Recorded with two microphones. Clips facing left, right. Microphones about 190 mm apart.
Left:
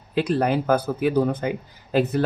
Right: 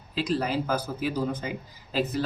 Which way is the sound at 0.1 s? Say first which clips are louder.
Left 6 dB; 60° left (ahead or behind).